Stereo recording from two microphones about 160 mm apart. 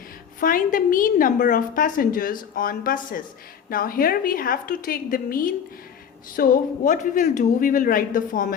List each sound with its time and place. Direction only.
0.3 s a woman's voice: 60° left (ahead or behind)